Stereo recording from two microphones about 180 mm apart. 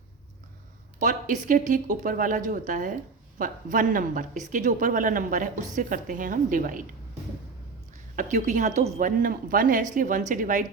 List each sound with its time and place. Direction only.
0.9 s a woman's voice: 45° right (ahead or behind)
8.1 s a woman's voice: 45° right (ahead or behind)